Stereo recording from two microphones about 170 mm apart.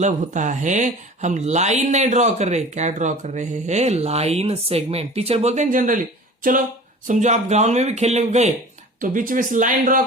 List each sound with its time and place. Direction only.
0.0 s speech: 45° right (ahead or behind)
9.0 s speech: 55° right (ahead or behind)